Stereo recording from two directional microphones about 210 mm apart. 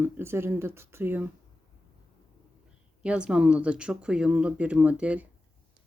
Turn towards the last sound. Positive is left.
turn(degrees=-5)  # may be behind; listen again after turning